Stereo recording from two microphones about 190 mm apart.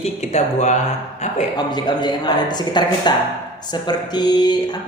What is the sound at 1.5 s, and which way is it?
Speech, 20° left (ahead or behind).